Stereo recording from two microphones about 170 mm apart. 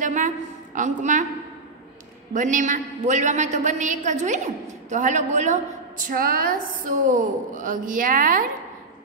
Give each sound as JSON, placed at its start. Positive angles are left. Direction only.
{"t": 0.0, "sound": "a man's voice", "side_deg": -50}
{"t": 2.3, "sound": "a man's voice", "side_deg": -50}
{"t": 6.0, "sound": "a man's voice", "side_deg": -60}